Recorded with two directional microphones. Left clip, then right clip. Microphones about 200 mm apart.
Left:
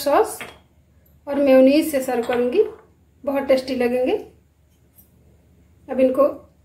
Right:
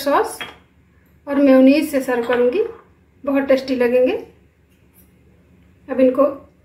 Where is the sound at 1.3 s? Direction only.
15° left (ahead or behind).